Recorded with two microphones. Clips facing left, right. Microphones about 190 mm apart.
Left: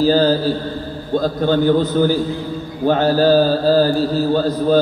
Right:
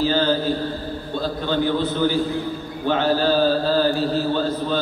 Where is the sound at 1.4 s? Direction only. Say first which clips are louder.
Left 6 dB; 45° left (ahead or behind).